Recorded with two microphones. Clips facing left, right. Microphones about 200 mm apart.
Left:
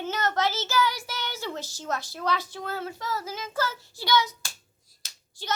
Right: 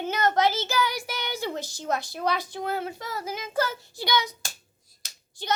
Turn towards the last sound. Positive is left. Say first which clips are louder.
# right 3 dB
turn(degrees=-15)  # may be behind; listen again after turning